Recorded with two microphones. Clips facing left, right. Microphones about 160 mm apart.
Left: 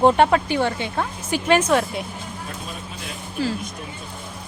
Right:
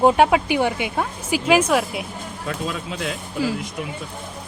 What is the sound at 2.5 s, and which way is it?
Speech, 90° right.